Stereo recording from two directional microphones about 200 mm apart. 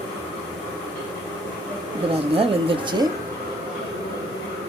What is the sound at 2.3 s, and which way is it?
Speech, 25° right (ahead or behind).